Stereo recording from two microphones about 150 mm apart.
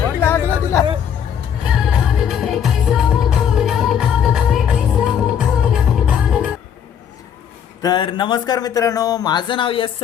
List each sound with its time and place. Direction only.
0.2 s chatter: 15° left (ahead or behind)
1.7 s music: 5° right (ahead or behind)
7.8 s speech: 30° left (ahead or behind)